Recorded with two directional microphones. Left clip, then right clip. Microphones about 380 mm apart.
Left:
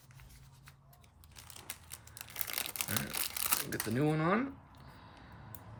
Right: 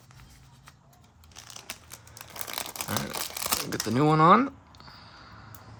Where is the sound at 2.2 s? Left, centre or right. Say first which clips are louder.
Right 5 dB; centre.